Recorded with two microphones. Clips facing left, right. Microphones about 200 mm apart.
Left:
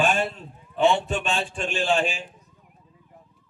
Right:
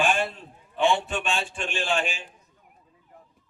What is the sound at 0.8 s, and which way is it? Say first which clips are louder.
A man's voice: left 3 dB; 40° left (ahead or behind).